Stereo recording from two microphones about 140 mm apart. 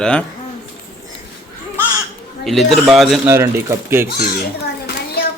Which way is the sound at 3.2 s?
15° right (ahead or behind).